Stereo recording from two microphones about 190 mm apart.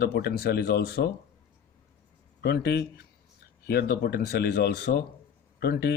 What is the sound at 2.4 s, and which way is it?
Speech, 55° left (ahead or behind).